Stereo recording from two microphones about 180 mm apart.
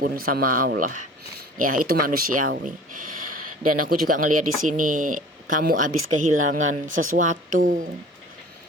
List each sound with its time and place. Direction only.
0.0 s speech: 55° right (ahead or behind)